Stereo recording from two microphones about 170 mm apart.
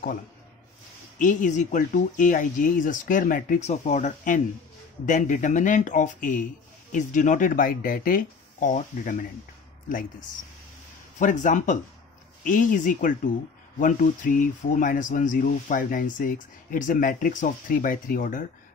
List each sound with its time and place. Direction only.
1.1 s speech: 50° left (ahead or behind)
11.1 s speech: 50° left (ahead or behind)